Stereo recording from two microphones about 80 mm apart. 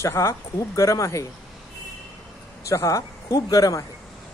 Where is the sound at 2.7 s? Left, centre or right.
Left.